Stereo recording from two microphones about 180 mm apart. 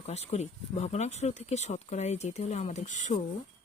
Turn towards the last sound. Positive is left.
turn(degrees=45)  # may be behind; listen again after turning